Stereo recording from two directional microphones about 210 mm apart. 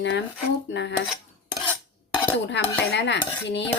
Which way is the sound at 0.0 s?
60° left (ahead or behind).